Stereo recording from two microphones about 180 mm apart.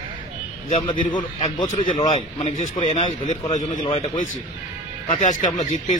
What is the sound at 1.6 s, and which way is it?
Speech, 45° left (ahead or behind).